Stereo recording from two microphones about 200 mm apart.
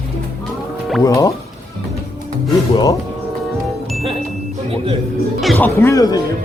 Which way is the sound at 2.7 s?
20° left (ahead or behind).